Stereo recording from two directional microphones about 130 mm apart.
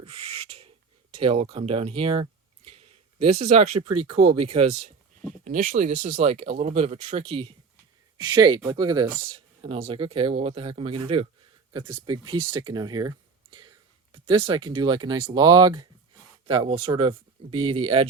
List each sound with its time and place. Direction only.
0.0 s owl: 50° right (ahead or behind)
1.1 s speech: 45° right (ahead or behind)
2.6 s a sound: 50° right (ahead or behind)
4.4 s speech: 55° right (ahead or behind)
5.5 s speech: 90° right; by 7.5 s 45° right (ahead or behind)
8.2 s speech: 30° right (ahead or behind)
9.2 s speech: 45° right (ahead or behind)
16.5 s speech: 45° right (ahead or behind)